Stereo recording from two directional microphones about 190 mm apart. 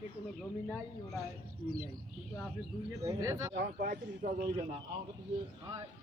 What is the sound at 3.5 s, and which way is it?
Speech, 45° right (ahead or behind).